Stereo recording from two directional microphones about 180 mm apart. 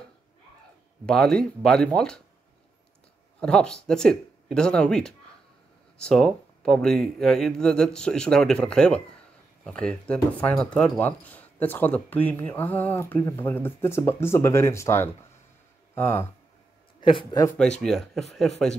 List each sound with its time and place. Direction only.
1.0 s speech: 5° left (ahead or behind)
3.3 s speech: 5° left (ahead or behind)
17.0 s a man's voice: 30° left (ahead or behind)
17.6 s speech: 5° left (ahead or behind)